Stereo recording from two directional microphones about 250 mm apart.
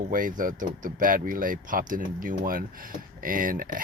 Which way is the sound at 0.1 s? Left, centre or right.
Right.